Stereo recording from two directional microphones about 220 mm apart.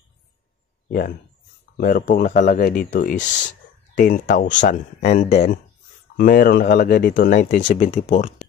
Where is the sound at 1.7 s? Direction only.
40° left (ahead or behind).